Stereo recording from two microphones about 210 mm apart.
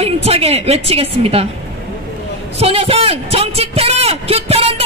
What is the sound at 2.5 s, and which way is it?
Speech, 30° right (ahead or behind).